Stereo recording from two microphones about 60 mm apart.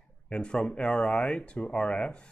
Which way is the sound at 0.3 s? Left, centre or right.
Centre.